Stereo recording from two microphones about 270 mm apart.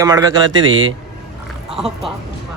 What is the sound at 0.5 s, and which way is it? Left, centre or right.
Speech, right.